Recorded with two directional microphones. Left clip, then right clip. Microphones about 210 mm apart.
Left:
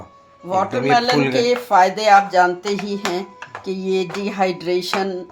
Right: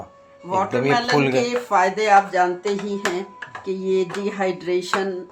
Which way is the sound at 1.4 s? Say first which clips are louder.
Left 4 dB; 45° left (ahead or behind).